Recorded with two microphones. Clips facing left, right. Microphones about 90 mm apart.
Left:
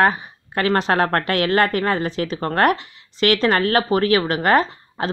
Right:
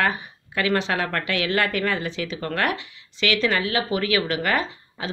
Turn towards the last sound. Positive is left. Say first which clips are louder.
# left 8 dB
turn(degrees=45)  # may be behind; listen again after turning